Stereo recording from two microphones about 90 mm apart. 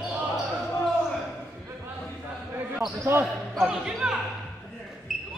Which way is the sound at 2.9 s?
30° right (ahead or behind).